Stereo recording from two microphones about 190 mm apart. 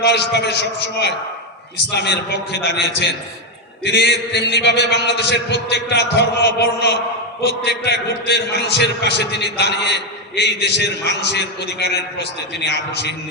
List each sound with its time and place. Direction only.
0.0 s a man's voice: 60° left (ahead or behind)
3.8 s a man's voice: 60° left (ahead or behind)